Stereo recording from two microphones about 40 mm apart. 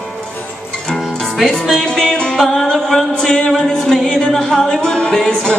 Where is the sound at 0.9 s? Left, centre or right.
Centre.